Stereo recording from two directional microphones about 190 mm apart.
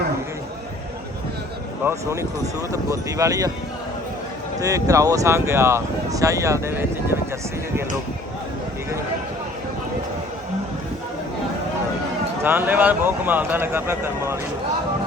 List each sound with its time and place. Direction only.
1.8 s speech: 15° right (ahead or behind)
4.6 s speech: 15° right (ahead or behind)
12.4 s speech: 10° right (ahead or behind)